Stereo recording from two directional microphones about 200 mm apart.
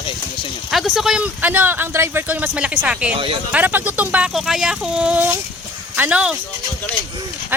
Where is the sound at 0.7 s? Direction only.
Centre (ahead or behind).